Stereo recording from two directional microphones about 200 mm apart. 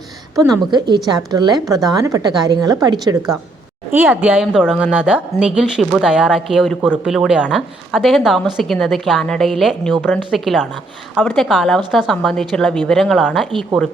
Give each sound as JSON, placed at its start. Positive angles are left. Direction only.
{"t": 0.5, "sound": "a woman's voice", "side_deg": -20}
{"t": 3.9, "sound": "a woman's voice", "side_deg": -10}